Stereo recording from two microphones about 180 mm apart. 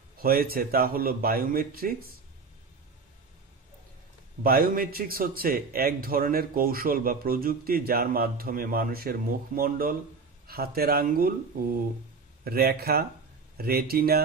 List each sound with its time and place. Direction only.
0.2 s a man's voice: 55° right (ahead or behind)
4.4 s a man's voice: 55° right (ahead or behind)
12.4 s a man's voice: 60° right (ahead or behind)